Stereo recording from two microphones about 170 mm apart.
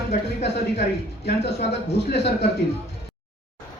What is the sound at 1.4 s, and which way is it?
Speech, 40° left (ahead or behind).